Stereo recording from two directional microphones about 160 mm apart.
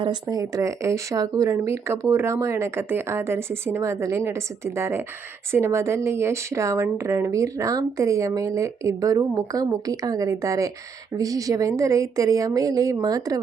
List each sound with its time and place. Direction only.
0.0 s speech: 25° right (ahead or behind)